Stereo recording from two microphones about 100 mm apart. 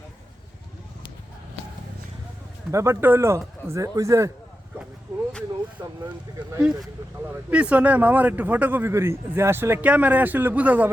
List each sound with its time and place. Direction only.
2.7 s speech: 25° right (ahead or behind)
5.1 s vehicle: 30° right (ahead or behind)
5.8 s speech: 30° right (ahead or behind)
6.6 s speech: 10° right (ahead or behind)